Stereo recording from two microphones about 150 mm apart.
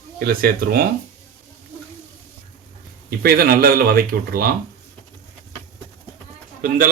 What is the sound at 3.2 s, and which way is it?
Speech, 85° right.